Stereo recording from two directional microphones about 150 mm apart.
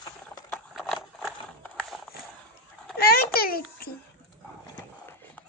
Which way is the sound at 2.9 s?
90° left.